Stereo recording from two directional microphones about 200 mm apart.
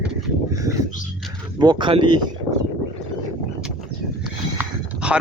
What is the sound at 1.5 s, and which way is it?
Speech, 20° right (ahead or behind).